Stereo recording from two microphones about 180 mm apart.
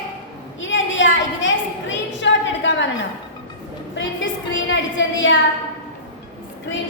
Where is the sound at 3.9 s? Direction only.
90° left.